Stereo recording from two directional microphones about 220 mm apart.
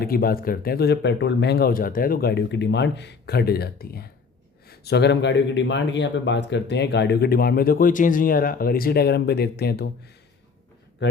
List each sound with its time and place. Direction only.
0.0 s a man's voice: 45° left (ahead or behind)